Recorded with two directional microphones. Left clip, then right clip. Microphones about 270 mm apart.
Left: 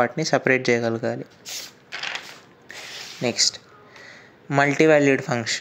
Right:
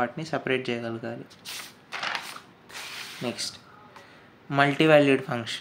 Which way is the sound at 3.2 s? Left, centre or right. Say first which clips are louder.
Left 12 dB; left.